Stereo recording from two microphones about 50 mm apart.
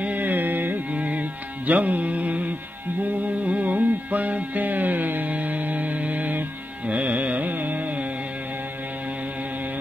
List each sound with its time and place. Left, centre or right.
0.0 s carnatic music: right
0.9 s music: right
6.9 s carnatic music: right